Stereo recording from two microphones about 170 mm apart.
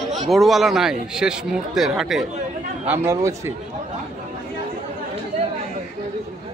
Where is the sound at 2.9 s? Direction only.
15° right (ahead or behind).